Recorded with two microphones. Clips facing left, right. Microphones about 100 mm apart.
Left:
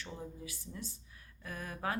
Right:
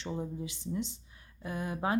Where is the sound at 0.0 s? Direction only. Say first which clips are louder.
Right 8 dB; 25° right (ahead or behind).